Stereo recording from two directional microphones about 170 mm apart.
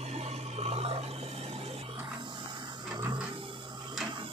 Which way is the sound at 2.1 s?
25° right (ahead or behind).